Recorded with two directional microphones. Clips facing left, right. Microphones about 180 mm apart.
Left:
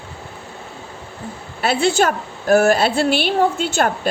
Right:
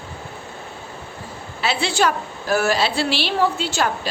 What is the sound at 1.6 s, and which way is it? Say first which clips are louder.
A woman's voice: left 4 dB; 50° left (ahead or behind).